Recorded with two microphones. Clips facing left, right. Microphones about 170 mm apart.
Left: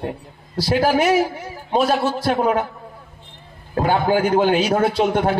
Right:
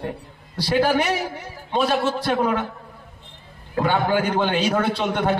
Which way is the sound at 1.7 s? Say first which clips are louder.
Left 3 dB; 40° left (ahead or behind).